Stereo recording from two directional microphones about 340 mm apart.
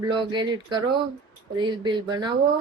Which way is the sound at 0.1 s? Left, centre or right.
Centre.